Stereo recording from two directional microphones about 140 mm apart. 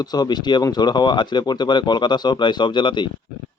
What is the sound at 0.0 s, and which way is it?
Speech, 30° left (ahead or behind).